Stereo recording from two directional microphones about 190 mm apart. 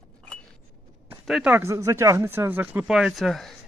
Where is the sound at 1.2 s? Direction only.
5° right (ahead or behind).